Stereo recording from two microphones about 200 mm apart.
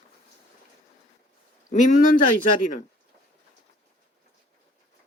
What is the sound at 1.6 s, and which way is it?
Speech, 40° left (ahead or behind).